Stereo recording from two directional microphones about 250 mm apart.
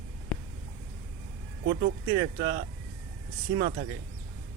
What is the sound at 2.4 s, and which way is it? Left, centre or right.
Speech, right.